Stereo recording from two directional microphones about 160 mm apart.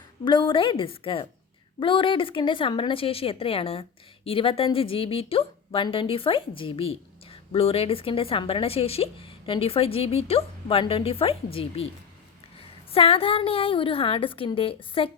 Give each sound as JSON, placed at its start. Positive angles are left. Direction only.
{"t": 0.3, "sound": "a woman's voice", "side_deg": 30}
{"t": 12.9, "sound": "a woman's voice", "side_deg": 35}